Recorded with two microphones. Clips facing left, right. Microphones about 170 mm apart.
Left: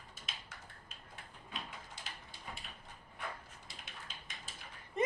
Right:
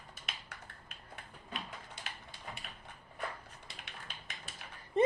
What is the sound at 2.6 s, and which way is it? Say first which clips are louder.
Dog: right 2 dB; 65° right (ahead or behind).